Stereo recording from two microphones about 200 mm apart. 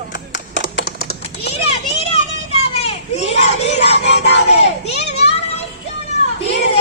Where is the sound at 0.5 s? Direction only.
75° left (ahead or behind).